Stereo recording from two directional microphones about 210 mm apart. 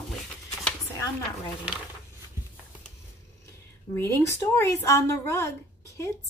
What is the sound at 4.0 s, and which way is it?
Speech, 10° left (ahead or behind).